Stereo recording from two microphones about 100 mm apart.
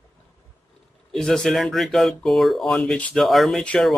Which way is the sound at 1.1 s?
5° left (ahead or behind).